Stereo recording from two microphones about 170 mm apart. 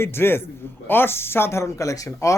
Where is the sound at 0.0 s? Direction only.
15° left (ahead or behind).